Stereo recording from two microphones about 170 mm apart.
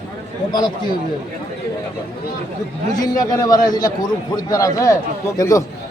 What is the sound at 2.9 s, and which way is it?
Speech, 20° left (ahead or behind).